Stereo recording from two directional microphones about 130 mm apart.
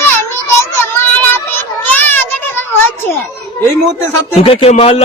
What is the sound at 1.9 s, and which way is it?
Children playing, 15° left (ahead or behind).